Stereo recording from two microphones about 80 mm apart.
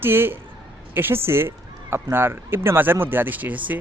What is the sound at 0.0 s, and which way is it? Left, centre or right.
Speech, right.